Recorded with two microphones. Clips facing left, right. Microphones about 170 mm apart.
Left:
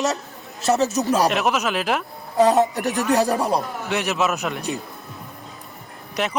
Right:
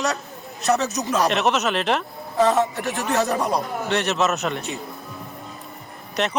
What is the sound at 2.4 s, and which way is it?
Speech, 40° left (ahead or behind).